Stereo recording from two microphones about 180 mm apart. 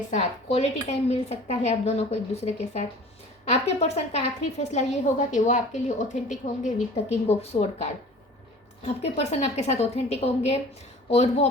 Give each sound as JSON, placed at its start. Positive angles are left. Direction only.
{"t": 0.1, "sound": "speech", "side_deg": 40}